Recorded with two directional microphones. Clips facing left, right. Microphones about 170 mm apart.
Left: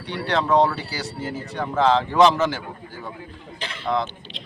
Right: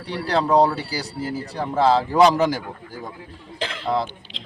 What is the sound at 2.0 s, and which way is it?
Speech, 10° right (ahead or behind).